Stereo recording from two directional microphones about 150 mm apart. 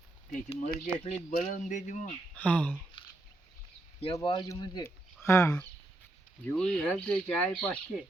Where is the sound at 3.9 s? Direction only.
40° left (ahead or behind).